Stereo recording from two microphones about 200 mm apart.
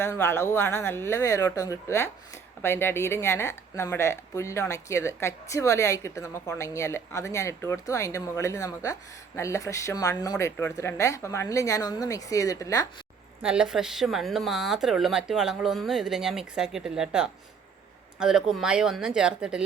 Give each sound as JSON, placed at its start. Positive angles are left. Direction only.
{"t": 0.0, "sound": "speech", "side_deg": 15}
{"t": 13.4, "sound": "a woman's voice", "side_deg": -5}